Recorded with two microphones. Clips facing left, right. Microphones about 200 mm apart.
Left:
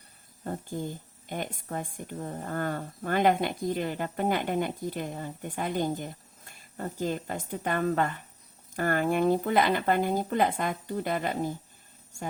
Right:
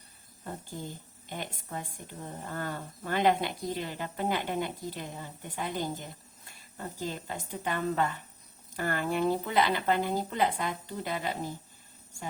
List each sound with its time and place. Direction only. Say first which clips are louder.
1.3 s a woman's voice: left 4 dB; 50° left (ahead or behind)